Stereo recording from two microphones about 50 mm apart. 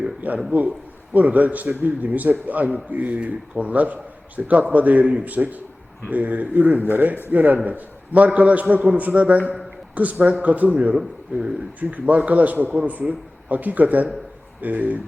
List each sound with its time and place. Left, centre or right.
0.2 s a sound: right
1.1 s a man's voice: right
10.9 s speech: centre
11.8 s a man's voice: right